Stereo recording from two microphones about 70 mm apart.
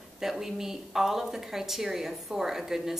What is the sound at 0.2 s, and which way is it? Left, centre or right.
A woman's voice, centre.